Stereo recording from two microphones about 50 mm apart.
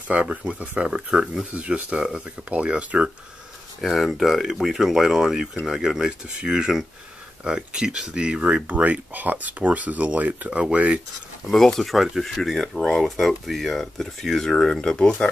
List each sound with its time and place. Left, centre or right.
0.1 s speech: right
1.5 s speech: right
3.9 s speech: centre; by 11.0 s right
11.4 s speech: centre